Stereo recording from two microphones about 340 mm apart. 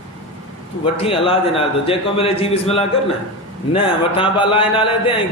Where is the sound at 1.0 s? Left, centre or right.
Centre.